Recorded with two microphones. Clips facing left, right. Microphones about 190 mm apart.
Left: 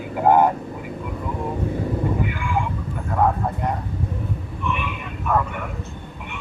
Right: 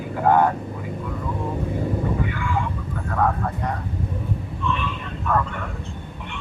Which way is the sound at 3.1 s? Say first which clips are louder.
Left 2 dB; 15° left (ahead or behind).